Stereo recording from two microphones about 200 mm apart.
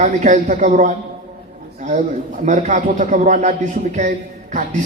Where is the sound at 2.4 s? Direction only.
35° right (ahead or behind).